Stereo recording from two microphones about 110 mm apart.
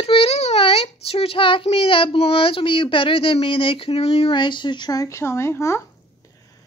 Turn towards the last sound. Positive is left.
turn(degrees=25)  # may be behind; listen again after turning